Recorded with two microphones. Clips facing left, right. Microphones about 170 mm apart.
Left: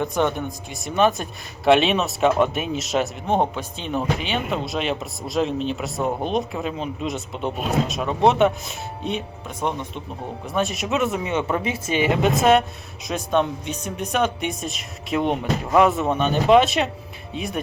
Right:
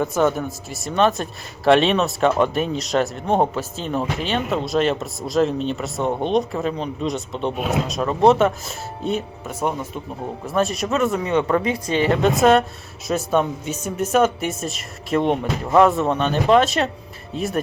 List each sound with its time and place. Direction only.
0.0 s speech: 5° right (ahead or behind)
11.2 s speech: 20° left (ahead or behind)
11.9 s speech: 5° left (ahead or behind)